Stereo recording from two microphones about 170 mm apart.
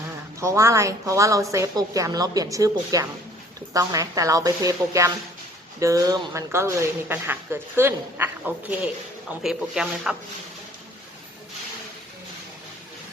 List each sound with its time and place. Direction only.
0.3 s a woman's voice: 15° right (ahead or behind)